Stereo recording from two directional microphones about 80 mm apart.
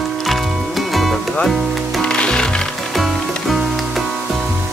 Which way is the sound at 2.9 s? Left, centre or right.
Centre.